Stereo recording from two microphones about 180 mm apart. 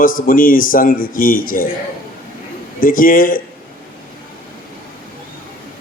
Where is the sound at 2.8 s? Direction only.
50° left (ahead or behind).